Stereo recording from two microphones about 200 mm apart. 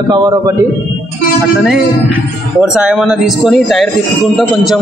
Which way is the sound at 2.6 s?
5° right (ahead or behind).